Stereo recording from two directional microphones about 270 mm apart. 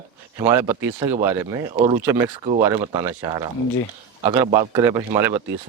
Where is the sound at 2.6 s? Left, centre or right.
Centre.